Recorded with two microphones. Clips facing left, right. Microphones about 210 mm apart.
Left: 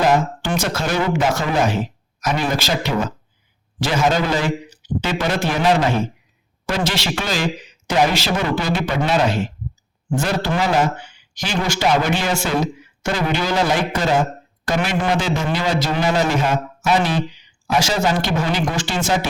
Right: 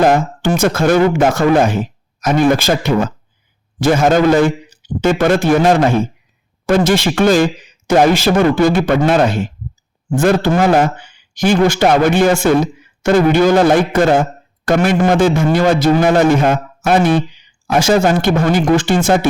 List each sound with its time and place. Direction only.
0.0 s a man's voice: 50° right (ahead or behind)